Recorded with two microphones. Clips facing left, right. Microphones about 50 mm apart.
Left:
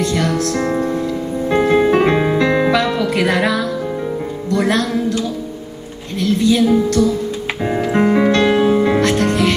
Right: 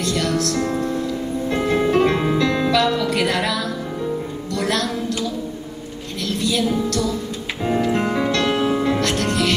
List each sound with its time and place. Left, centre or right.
0.0 s music: left
4.5 s a woman's voice: left
6.1 s music: left